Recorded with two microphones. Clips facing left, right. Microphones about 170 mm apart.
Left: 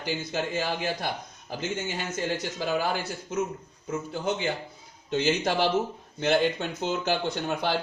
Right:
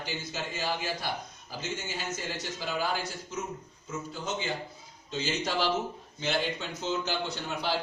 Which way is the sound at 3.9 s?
60° left (ahead or behind).